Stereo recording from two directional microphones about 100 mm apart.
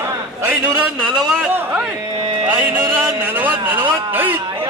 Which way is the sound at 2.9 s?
20° right (ahead or behind).